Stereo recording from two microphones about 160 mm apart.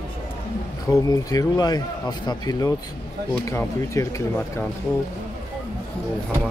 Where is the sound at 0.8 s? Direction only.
20° left (ahead or behind).